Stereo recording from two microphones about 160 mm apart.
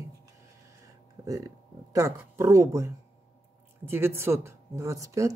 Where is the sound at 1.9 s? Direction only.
20° right (ahead or behind).